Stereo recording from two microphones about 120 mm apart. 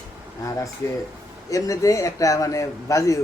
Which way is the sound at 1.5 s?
25° left (ahead or behind).